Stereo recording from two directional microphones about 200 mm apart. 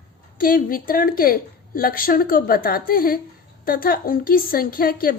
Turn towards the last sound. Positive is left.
turn(degrees=45)  # may be behind; listen again after turning